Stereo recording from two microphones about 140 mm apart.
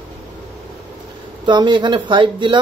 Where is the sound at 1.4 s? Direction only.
35° right (ahead or behind).